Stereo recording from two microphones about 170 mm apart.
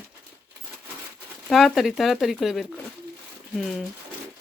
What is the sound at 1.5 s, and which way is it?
Speech, centre (ahead or behind).